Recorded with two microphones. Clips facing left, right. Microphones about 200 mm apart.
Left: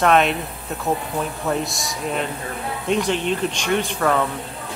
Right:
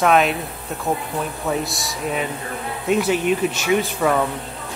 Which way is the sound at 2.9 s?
5° right (ahead or behind).